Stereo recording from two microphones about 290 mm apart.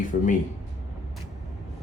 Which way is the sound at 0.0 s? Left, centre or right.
Left.